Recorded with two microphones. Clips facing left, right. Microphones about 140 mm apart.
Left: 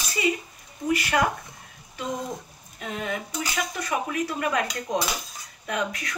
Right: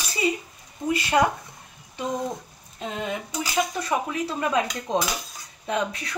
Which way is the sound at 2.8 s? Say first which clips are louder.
Right 1 dB; 25° right (ahead or behind).